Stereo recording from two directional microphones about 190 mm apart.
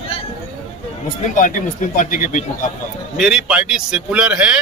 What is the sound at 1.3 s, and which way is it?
Speech, 45° left (ahead or behind).